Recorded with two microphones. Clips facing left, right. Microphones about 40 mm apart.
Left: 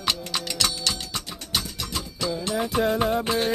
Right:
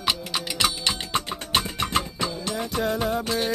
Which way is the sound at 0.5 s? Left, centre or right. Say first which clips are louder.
Right 3 dB; right.